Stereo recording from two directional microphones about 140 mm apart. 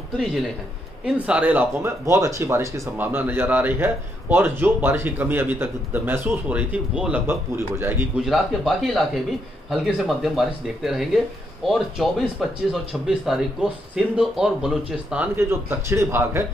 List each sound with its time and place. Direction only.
1.0 s speech: 10° right (ahead or behind)
8.2 s speech: centre (ahead or behind)
15.9 s speech: 20° right (ahead or behind)